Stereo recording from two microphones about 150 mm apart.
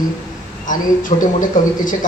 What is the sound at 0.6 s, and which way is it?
A man's voice, 60° left (ahead or behind).